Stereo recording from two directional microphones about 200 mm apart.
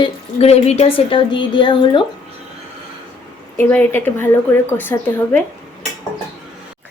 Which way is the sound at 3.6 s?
10° left (ahead or behind).